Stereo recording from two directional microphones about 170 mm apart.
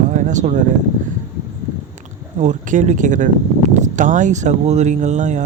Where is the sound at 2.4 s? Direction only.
45° right (ahead or behind).